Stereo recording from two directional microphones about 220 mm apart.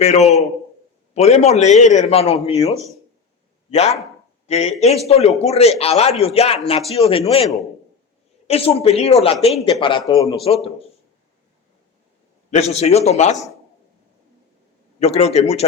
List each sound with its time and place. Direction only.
0.0 s a man's voice: 30° left (ahead or behind)
8.4 s a man's voice: 25° left (ahead or behind)
10.4 s a man's voice: 25° left (ahead or behind)
12.5 s a man's voice: 30° left (ahead or behind)
14.9 s a man's voice: 30° left (ahead or behind)